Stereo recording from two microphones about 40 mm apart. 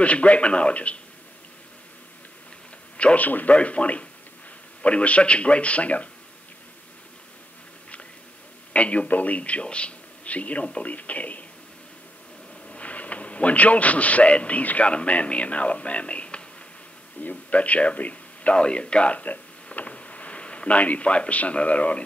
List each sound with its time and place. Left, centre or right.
0.0 s a man's voice: left
3.0 s a man's voice: left
3.3 s speech: left
3.5 s a man's voice: left
8.7 s a man's voice: left
12.6 s a man's voice: left